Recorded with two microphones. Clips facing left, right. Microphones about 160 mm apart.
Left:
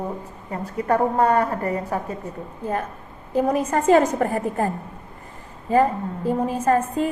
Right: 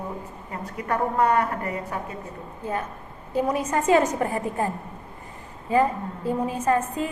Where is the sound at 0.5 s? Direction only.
35° left (ahead or behind).